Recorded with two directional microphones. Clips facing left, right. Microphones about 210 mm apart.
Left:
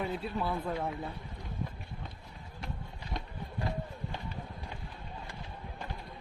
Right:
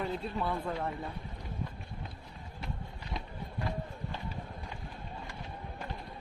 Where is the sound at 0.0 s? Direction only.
5° left (ahead or behind).